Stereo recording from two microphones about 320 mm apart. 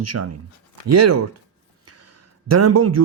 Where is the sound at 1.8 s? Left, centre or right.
Right.